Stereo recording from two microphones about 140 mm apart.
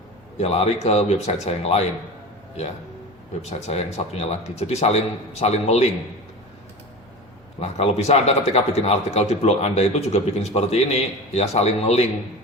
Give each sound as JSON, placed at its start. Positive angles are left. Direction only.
{"t": 0.3, "sound": "a man's voice", "side_deg": 50}
{"t": 7.6, "sound": "a man's voice", "side_deg": 50}